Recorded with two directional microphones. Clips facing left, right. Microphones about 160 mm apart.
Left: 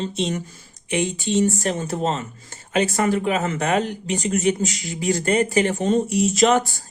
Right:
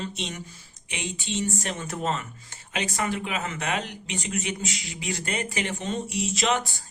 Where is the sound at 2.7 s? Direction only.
45° left (ahead or behind).